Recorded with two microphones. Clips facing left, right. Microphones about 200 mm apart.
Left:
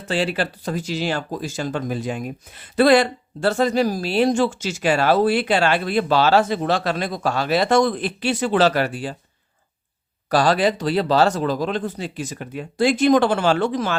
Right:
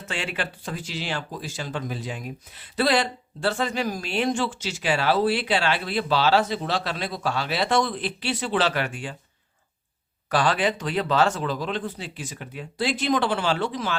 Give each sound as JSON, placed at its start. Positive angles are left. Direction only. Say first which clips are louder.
{"t": 0.0, "sound": "speech", "louder": "left 8 dB", "side_deg": 35}
{"t": 10.2, "sound": "speech", "louder": "left 5 dB", "side_deg": 40}